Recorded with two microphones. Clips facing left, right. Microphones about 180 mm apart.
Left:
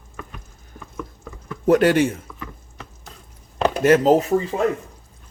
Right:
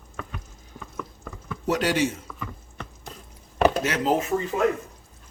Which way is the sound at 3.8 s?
45° left (ahead or behind).